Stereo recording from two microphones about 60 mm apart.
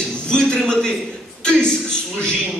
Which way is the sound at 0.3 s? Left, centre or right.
Centre.